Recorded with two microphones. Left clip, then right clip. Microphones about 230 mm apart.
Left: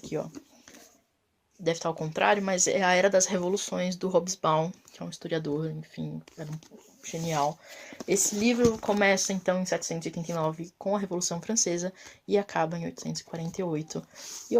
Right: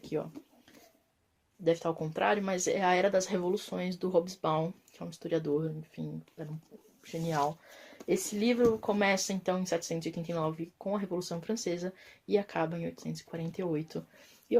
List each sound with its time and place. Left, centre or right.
0.0 s a sound: left
1.6 s speech: left
7.3 s speech: left